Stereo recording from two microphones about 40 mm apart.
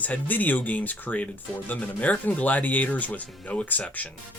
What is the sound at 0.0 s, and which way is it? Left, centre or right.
Speech, left.